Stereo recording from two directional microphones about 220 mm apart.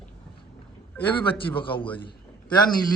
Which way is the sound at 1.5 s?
25° left (ahead or behind).